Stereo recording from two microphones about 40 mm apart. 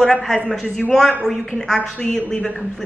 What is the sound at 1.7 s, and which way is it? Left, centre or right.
Speech, left.